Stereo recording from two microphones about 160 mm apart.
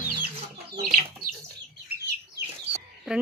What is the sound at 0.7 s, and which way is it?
Speech, 65° right (ahead or behind).